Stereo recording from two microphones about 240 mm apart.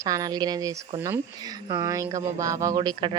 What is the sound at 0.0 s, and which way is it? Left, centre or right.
Speech, centre.